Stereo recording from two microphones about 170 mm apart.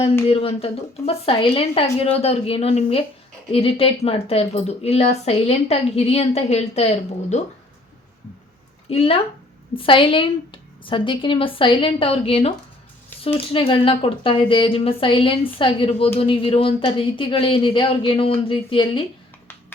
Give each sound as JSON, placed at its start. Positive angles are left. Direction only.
{"t": 0.3, "sound": "speech", "side_deg": 35}
{"t": 8.9, "sound": "speech", "side_deg": 35}